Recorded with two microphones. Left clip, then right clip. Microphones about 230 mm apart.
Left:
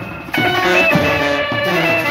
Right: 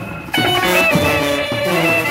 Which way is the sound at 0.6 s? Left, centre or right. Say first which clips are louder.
Left 2 dB; right.